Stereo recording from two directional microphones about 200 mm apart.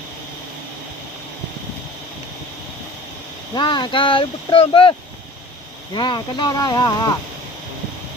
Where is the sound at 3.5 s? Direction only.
20° left (ahead or behind).